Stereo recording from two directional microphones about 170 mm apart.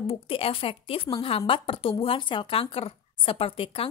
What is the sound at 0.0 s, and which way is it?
A woman's voice, 35° left (ahead or behind).